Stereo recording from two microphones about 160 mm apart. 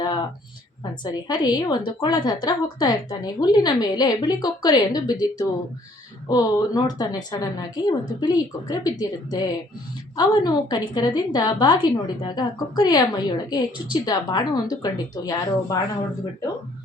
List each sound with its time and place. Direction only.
0.0 s a sound: 30° left (ahead or behind)
1.0 s a woman's voice: 25° left (ahead or behind)
6.2 s a woman's voice: 20° left (ahead or behind)